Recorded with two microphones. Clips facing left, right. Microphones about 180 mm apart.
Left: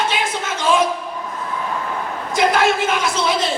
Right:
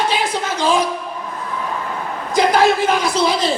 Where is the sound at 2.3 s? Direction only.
35° right (ahead or behind).